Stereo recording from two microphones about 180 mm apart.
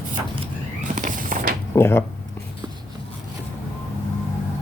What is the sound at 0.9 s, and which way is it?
Walk, 45° right (ahead or behind).